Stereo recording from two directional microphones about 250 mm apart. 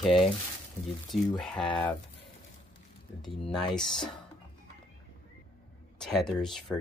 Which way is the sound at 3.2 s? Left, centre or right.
Centre.